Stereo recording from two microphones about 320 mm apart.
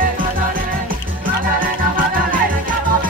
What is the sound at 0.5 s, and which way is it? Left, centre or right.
Music, right.